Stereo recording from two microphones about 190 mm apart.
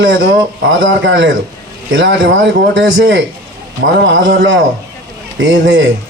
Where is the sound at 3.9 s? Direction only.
75° right (ahead or behind).